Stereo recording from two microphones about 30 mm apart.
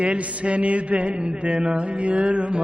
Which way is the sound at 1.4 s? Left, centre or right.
Right.